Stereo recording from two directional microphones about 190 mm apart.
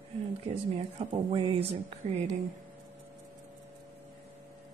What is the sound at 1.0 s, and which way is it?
A woman's voice, 25° right (ahead or behind).